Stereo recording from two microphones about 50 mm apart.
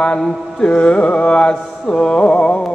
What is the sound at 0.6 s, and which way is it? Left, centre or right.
Music, left.